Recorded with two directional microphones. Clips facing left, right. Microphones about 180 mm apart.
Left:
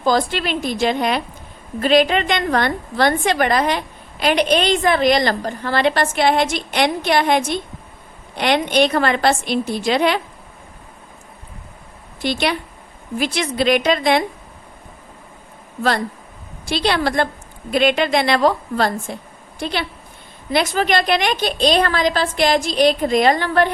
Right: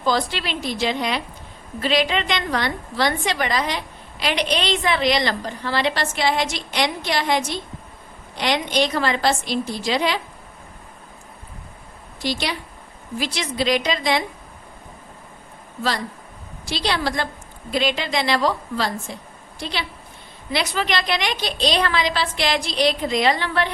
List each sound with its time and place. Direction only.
0.0 s a woman's voice: 50° left (ahead or behind)
12.2 s a woman's voice: 60° left (ahead or behind)
16.6 s a woman's voice: 55° left (ahead or behind)